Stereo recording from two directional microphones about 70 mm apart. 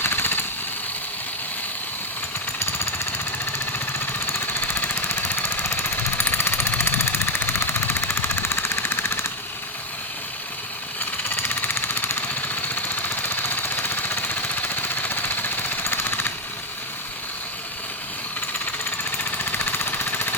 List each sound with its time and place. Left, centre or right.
0.0 s vehicle: left
2.6 s jackhammer: left
3.7 s lawn mower: left
4.6 s jackhammer: left
11.4 s jackhammer: left
12.3 s jackhammer: left
19.1 s jackhammer: left